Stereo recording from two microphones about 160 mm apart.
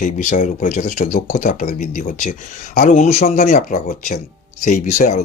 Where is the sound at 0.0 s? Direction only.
50° left (ahead or behind).